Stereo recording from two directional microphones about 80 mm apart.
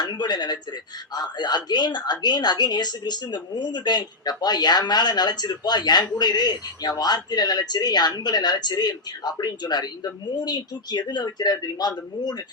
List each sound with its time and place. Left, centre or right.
0.0 s a woman's voice: left